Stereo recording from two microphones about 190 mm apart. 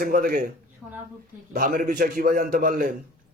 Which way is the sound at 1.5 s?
45° right (ahead or behind).